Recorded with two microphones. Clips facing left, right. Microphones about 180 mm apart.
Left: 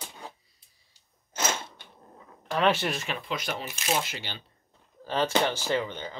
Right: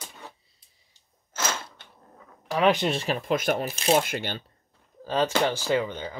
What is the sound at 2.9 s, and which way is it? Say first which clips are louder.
Speech: right 7 dB; 40° right (ahead or behind).